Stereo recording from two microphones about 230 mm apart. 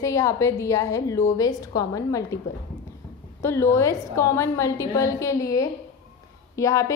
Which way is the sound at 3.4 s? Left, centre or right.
Centre.